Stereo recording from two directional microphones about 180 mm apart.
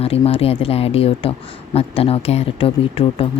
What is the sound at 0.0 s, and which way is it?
Speech, 35° left (ahead or behind).